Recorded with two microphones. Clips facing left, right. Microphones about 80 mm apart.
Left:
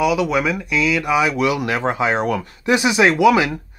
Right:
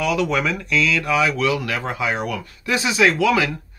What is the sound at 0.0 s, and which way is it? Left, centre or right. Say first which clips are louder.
Speech: left 3 dB; centre.